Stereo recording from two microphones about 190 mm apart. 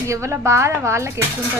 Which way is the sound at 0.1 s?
15° right (ahead or behind).